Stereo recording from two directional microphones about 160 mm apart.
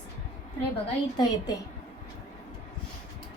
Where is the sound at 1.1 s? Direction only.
25° left (ahead or behind).